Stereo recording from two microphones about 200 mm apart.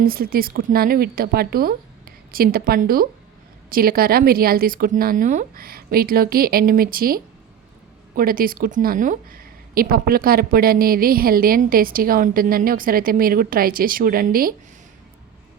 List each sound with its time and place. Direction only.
0.0 s a woman's voice: 50° right (ahead or behind)